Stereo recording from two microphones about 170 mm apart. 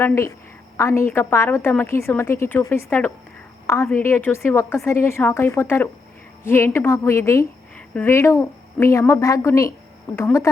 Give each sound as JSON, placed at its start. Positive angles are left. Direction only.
{"t": 0.0, "sound": "a woman's voice", "side_deg": 15}